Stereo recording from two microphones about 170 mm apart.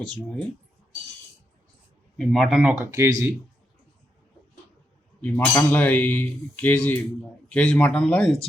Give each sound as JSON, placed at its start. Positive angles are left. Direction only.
{"t": 2.1, "sound": "speech", "side_deg": 0}
{"t": 2.7, "sound": "speech", "side_deg": -15}
{"t": 5.2, "sound": "speech", "side_deg": 10}